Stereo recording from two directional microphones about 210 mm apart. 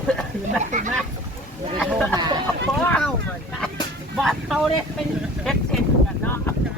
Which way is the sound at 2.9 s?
5° left (ahead or behind).